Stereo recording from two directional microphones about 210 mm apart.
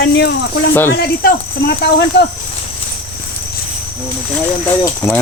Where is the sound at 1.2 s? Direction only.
50° left (ahead or behind).